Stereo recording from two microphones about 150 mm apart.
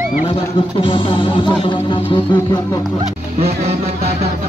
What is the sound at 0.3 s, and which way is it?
Music, 35° left (ahead or behind).